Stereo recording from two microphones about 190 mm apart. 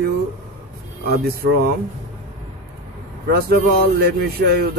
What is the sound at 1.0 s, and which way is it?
Speech, 55° right (ahead or behind).